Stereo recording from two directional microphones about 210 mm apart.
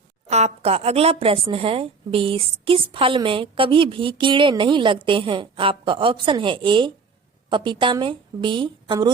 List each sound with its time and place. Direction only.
0.3 s a woman's voice: 30° right (ahead or behind)